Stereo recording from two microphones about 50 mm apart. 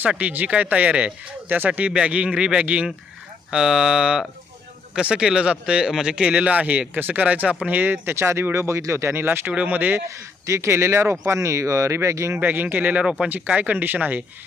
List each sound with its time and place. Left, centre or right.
0.2 s speech: right
1.5 s speech: right
2.0 s speech: right
8.1 s speech: right
9.1 s speech: right
9.5 s speech: right
10.4 s speech: right
12.4 s speech: right